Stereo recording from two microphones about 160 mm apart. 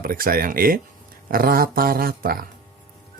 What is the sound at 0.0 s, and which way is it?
Speech, 65° right (ahead or behind).